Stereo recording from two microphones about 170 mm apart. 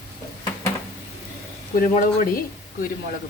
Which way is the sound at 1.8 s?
55° left (ahead or behind).